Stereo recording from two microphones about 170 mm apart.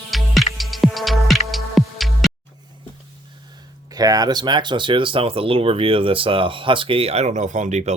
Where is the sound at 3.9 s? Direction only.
20° right (ahead or behind).